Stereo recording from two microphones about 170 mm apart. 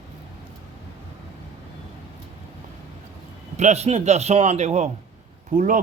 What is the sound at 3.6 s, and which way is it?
A man's voice, 40° right (ahead or behind).